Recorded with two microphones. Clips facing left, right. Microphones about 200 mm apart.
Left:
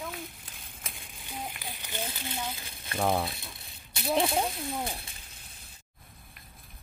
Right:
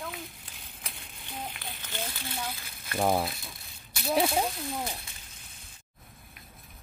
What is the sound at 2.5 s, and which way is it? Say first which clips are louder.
Speech: right 1 dB; 25° left (ahead or behind).